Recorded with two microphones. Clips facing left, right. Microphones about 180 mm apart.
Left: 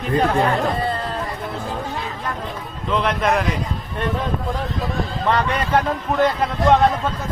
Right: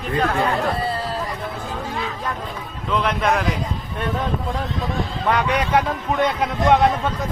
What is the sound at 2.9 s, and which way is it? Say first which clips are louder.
Speech: left 1 dB; centre (ahead or behind).